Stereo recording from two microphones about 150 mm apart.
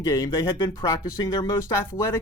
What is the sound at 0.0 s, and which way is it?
Speech, 20° left (ahead or behind).